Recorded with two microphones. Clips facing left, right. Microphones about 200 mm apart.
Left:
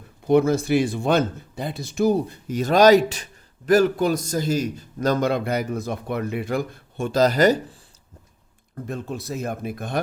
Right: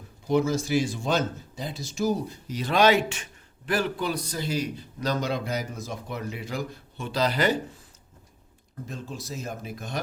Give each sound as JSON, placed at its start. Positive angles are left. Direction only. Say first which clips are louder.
{"t": 0.3, "sound": "a man's voice", "louder": "left 6 dB", "side_deg": 60}
{"t": 8.9, "sound": "speech", "louder": "left 7 dB", "side_deg": 60}